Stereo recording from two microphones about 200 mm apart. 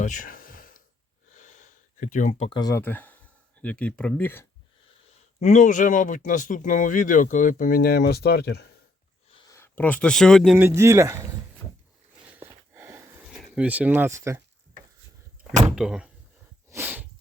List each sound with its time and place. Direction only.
0.0 s a sound: 40° left (ahead or behind)
1.3 s gasp: 35° left (ahead or behind)
2.5 s speech: 20° left (ahead or behind)
5.4 s speech: 35° left (ahead or behind); by 8.6 s 55° left (ahead or behind)
9.5 s speech: 10° left (ahead or behind)
10.7 s speech: 15° right (ahead or behind)
12.7 s a sound: 10° right (ahead or behind)
15.7 s speech: 5° right (ahead or behind)
16.6 s sneeze: 10° right (ahead or behind)